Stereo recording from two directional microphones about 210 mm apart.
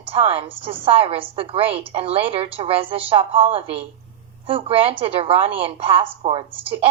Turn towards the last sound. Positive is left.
turn(degrees=-25)  # may be behind; listen again after turning